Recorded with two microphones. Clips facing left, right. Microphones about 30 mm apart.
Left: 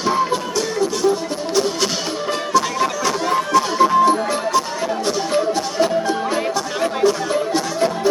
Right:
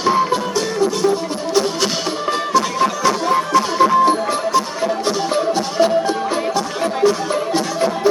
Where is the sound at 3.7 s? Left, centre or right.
Right.